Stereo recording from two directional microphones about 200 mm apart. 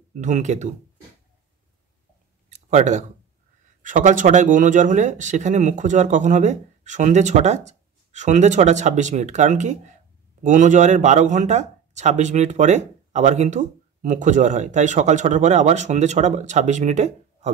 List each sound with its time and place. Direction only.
0.1 s speech: 35° right (ahead or behind)
2.5 s speech: 35° right (ahead or behind)